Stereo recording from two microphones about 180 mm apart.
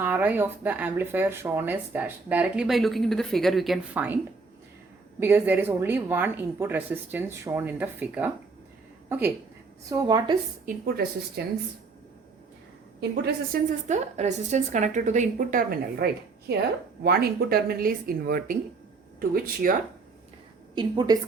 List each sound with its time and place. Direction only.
0.0 s speech: 10° right (ahead or behind)
5.2 s a woman's voice: 10° right (ahead or behind)
10.7 s speech: 60° right (ahead or behind)
13.0 s speech: 65° right (ahead or behind)
13.8 s a woman's voice: 40° right (ahead or behind)
17.0 s speech: 60° right (ahead or behind)
20.7 s a woman's voice: 25° right (ahead or behind)